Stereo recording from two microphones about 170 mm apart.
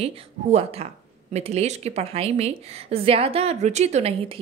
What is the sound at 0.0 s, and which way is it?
A woman's voice, 35° right (ahead or behind).